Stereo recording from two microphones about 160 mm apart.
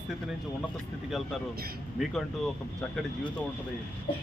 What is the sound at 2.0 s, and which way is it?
Speech, centre (ahead or behind).